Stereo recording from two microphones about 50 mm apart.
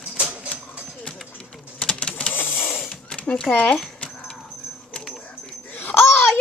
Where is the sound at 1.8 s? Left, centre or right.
Centre.